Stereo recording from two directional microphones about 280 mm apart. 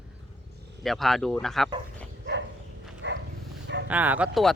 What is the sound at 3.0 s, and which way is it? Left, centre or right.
Dog, right.